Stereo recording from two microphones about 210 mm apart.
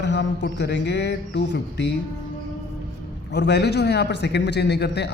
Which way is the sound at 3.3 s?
55° left (ahead or behind).